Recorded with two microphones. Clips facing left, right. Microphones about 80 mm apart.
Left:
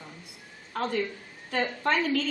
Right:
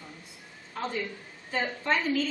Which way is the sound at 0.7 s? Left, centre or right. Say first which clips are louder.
Left 4 dB; left.